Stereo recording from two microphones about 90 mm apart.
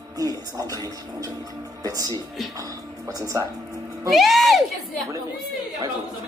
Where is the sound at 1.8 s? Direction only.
45° right (ahead or behind).